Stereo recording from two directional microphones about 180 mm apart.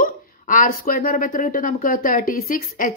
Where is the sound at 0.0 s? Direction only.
50° left (ahead or behind).